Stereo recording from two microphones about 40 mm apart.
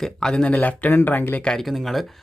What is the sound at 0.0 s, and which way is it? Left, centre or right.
Speech, centre.